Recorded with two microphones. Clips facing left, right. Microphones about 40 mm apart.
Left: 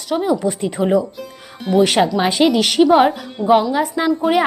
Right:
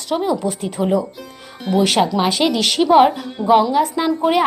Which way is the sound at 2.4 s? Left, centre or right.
Centre.